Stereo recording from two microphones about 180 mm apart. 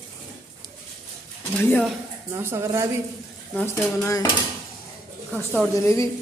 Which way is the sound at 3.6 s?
15° left (ahead or behind).